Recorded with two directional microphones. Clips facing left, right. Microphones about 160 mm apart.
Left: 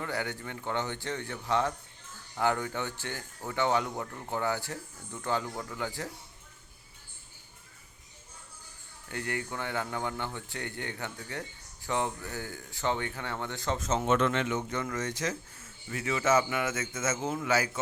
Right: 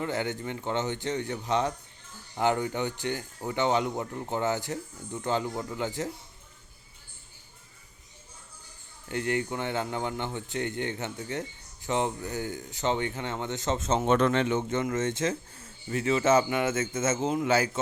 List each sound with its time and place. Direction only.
0.0 s a man's voice: 20° right (ahead or behind)
9.0 s a man's voice: 20° right (ahead or behind)